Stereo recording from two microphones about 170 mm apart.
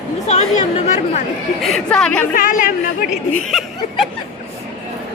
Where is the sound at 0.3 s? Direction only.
45° left (ahead or behind).